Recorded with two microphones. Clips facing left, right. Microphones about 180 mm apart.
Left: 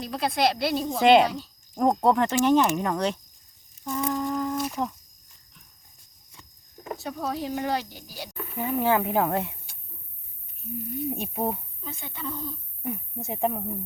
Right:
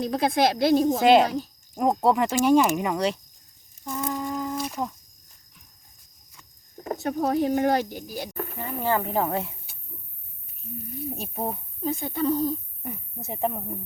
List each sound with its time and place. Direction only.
0.0 s speech: 50° right (ahead or behind)
1.7 s speech: 5° right (ahead or behind)
6.8 s speech: 50° right (ahead or behind)
8.5 s speech: 5° left (ahead or behind)
11.8 s speech: 40° right (ahead or behind)
12.8 s speech: centre (ahead or behind)